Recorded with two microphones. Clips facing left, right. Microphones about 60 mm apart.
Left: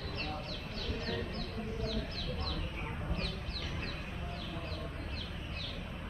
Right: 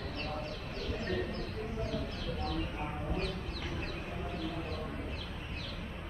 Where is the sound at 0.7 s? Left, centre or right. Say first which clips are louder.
Right 3 dB; right.